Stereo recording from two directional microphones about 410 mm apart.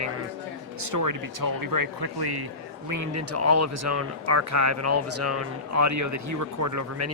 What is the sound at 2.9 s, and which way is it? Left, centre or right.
Speech, right.